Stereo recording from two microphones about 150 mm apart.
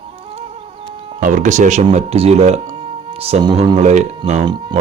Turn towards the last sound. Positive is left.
turn(degrees=-30)  # may be behind; listen again after turning